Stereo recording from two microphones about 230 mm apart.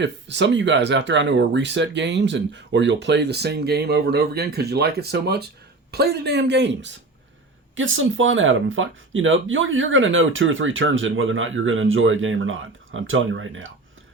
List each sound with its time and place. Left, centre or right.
0.0 s speech: right